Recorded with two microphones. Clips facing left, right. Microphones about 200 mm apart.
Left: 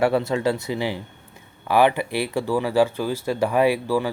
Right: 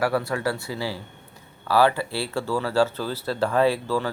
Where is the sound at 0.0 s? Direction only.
25° left (ahead or behind).